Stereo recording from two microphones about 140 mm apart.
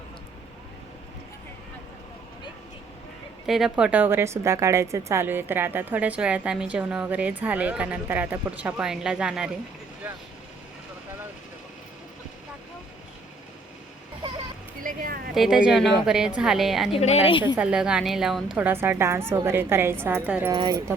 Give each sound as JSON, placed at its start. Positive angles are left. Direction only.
{"t": 3.4, "sound": "a woman's voice", "side_deg": 0}
{"t": 14.2, "sound": "a sound", "side_deg": -35}
{"t": 14.8, "sound": "a sound", "side_deg": -80}
{"t": 15.4, "sound": "a woman's voice", "side_deg": -5}
{"t": 16.9, "sound": "speech", "side_deg": 50}
{"t": 17.4, "sound": "a woman's voice", "side_deg": -10}
{"t": 18.5, "sound": "a woman's voice", "side_deg": -15}
{"t": 20.5, "sound": "speech", "side_deg": -30}